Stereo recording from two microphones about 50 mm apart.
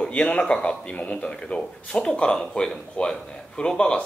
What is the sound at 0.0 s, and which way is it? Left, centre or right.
Speech, left.